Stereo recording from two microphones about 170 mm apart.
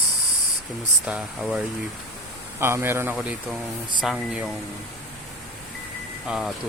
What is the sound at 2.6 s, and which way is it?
Speech, 15° right (ahead or behind).